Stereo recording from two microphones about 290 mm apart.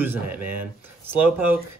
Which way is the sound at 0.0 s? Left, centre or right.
Centre.